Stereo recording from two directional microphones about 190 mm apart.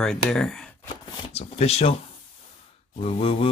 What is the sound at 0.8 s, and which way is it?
Shuffling cards, 30° left (ahead or behind).